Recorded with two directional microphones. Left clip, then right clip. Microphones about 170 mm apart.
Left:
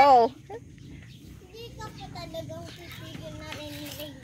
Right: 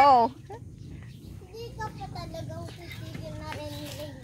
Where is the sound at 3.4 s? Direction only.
15° left (ahead or behind).